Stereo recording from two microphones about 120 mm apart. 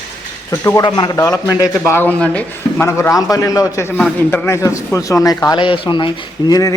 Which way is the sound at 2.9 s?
25° left (ahead or behind).